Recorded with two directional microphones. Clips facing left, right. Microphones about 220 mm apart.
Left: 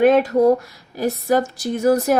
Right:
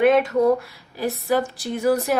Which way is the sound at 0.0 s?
40° left (ahead or behind).